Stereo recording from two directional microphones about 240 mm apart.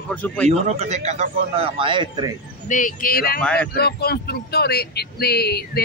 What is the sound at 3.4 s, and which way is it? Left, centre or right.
Speech, centre.